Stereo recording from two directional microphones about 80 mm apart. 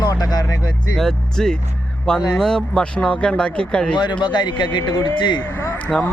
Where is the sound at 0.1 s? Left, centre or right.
Left.